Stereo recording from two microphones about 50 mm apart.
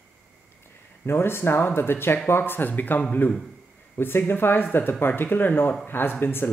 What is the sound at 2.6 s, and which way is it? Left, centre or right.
Speech, left.